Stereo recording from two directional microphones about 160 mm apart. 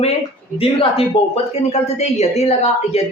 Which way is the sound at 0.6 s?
35° left (ahead or behind).